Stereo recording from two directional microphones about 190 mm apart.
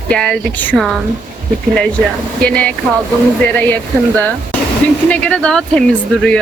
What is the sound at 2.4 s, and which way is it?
Speech, 5° left (ahead or behind).